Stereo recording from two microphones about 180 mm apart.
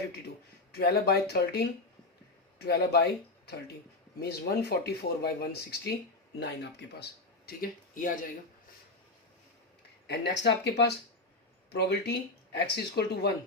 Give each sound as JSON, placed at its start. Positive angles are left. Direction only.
{"t": 0.7, "sound": "speech", "side_deg": 60}
{"t": 10.1, "sound": "speech", "side_deg": 70}